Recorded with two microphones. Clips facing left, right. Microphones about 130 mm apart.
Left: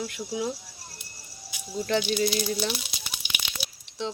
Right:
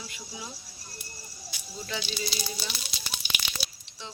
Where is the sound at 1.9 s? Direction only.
60° left (ahead or behind).